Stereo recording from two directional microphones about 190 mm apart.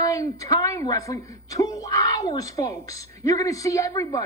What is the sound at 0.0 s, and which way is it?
Speech, 15° left (ahead or behind).